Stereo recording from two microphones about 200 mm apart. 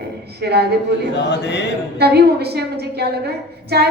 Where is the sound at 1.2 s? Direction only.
60° left (ahead or behind).